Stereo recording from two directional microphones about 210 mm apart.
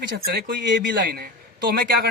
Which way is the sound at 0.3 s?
55° right (ahead or behind).